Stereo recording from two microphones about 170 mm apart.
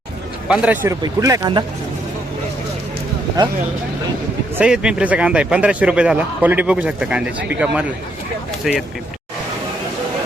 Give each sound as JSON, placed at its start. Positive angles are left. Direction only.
{"t": 0.4, "sound": "a man's voice", "side_deg": -5}
{"t": 1.0, "sound": "speech", "side_deg": -20}
{"t": 4.5, "sound": "a man's voice", "side_deg": -5}